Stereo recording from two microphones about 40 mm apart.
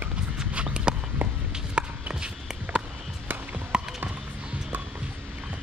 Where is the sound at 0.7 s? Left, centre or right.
Right.